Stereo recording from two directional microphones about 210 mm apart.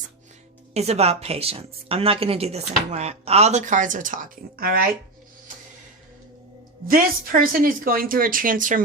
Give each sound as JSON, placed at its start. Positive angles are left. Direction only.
{"t": 0.7, "sound": "a woman's voice", "side_deg": -30}
{"t": 6.8, "sound": "a woman's voice", "side_deg": -40}